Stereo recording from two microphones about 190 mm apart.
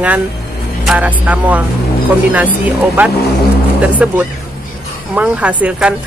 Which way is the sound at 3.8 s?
5° right (ahead or behind).